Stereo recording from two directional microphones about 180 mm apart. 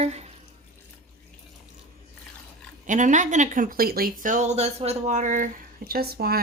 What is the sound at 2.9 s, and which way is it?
Speech, 45° right (ahead or behind).